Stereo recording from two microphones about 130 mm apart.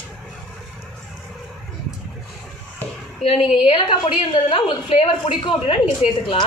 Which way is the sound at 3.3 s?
5° right (ahead or behind).